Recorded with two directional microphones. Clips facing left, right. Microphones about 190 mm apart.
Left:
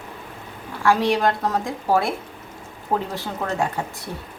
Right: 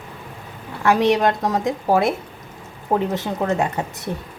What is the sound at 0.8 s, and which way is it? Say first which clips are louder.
Speech: right 2 dB; 20° right (ahead or behind).